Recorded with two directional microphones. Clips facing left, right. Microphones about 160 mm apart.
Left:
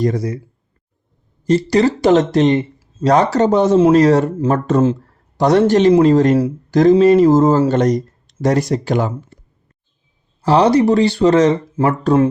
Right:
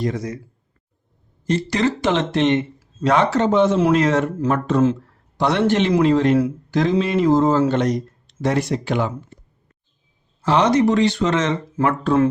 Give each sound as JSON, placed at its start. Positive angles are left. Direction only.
{"t": 0.0, "sound": "speech", "side_deg": 35}
{"t": 1.5, "sound": "a man's voice", "side_deg": 35}
{"t": 10.4, "sound": "speech", "side_deg": 35}